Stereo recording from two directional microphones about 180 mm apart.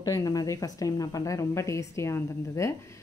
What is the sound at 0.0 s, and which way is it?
A woman's voice, 20° left (ahead or behind).